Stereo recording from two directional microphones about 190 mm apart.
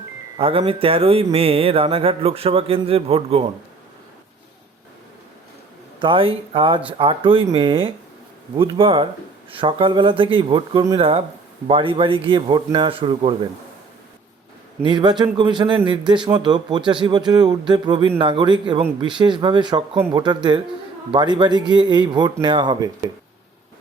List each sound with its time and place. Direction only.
0.3 s a man's voice: 30° right (ahead or behind)
6.0 s a man's voice: 25° right (ahead or behind)
14.8 s a man's voice: 25° right (ahead or behind)